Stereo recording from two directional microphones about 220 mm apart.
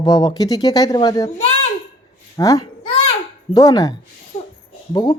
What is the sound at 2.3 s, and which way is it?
Speech, 15° left (ahead or behind).